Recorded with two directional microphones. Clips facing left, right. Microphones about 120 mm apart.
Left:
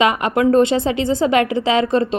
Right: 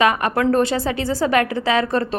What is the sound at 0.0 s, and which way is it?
A woman's voice, 20° left (ahead or behind).